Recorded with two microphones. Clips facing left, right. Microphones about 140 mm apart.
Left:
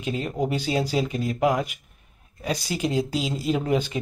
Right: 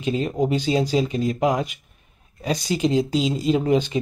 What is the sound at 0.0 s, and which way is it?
Speech, 25° right (ahead or behind).